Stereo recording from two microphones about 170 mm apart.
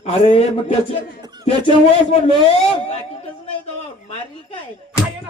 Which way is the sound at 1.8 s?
40° left (ahead or behind).